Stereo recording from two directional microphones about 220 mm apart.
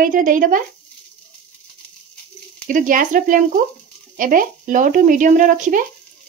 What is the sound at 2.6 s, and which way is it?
Speech, 35° right (ahead or behind).